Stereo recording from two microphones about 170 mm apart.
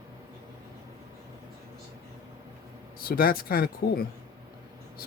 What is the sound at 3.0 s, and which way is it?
Speech, 60° left (ahead or behind).